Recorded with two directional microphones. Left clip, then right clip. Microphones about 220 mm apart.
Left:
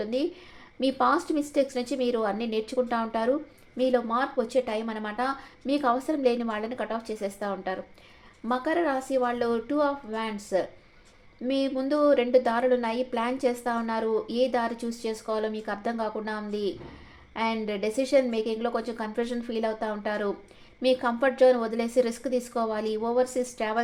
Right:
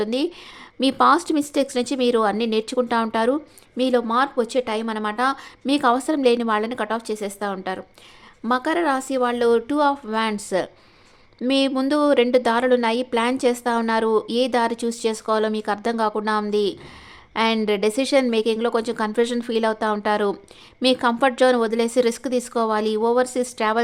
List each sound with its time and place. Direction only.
0.0 s a woman's voice: 35° right (ahead or behind)